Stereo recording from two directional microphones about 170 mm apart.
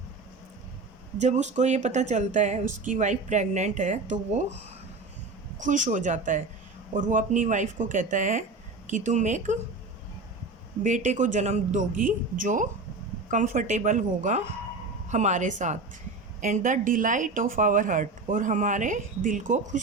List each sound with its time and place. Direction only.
1.2 s a woman's voice: 45° right (ahead or behind)
10.8 s a woman's voice: 45° right (ahead or behind)